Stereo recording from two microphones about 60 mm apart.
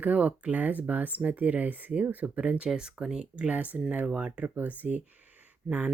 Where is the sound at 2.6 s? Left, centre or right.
Centre.